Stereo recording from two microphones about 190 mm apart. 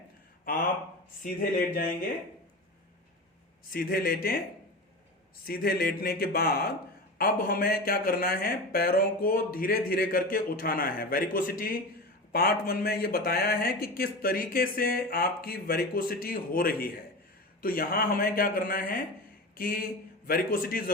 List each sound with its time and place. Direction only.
1.2 s speech: 50° left (ahead or behind)
3.7 s speech: 50° left (ahead or behind)
5.5 s speech: 50° left (ahead or behind)